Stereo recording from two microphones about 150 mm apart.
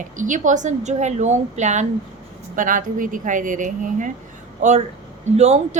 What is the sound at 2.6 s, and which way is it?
A woman's voice, 60° right (ahead or behind).